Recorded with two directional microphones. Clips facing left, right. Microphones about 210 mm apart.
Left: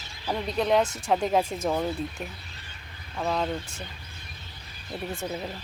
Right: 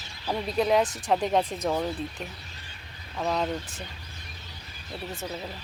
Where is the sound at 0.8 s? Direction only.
20° right (ahead or behind).